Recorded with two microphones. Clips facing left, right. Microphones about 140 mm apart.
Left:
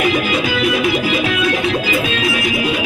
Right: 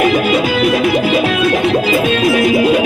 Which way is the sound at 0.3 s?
45° right (ahead or behind).